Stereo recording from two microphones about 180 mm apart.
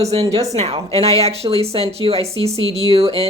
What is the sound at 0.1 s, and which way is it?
Speech, 35° right (ahead or behind).